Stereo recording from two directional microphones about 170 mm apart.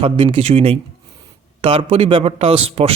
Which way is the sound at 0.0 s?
35° right (ahead or behind).